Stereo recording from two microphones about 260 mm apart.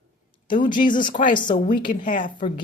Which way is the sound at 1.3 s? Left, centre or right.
Centre.